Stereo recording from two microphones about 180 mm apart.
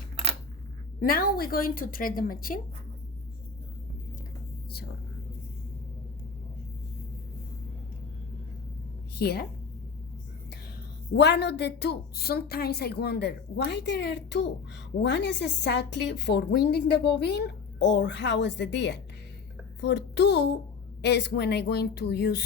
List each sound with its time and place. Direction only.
1.0 s a woman's voice: 55° left (ahead or behind)
9.1 s a woman's voice: 60° left (ahead or behind)
11.1 s a woman's voice: 70° left (ahead or behind)